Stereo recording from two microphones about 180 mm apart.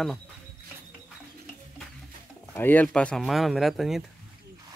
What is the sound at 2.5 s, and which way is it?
Speech, 10° left (ahead or behind).